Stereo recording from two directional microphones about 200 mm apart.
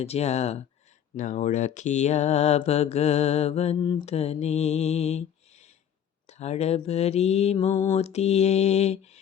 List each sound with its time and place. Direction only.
0.0 s speech: 30° left (ahead or behind)